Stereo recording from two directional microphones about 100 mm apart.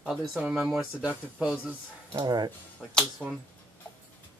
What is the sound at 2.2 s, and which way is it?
Speech, 45° right (ahead or behind).